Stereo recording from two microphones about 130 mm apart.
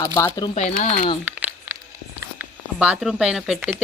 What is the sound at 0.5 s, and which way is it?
Speech, 65° left (ahead or behind).